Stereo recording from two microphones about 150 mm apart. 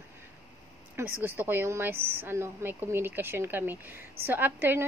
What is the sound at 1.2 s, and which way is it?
A woman's voice, 15° right (ahead or behind).